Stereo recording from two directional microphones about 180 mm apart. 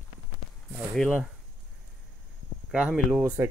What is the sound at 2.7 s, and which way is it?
Speech, 5° right (ahead or behind).